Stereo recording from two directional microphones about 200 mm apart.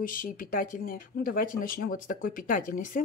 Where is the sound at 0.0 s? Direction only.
45° left (ahead or behind).